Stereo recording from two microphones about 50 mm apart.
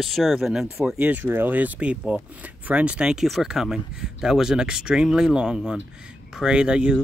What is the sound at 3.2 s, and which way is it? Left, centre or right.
Speech, centre.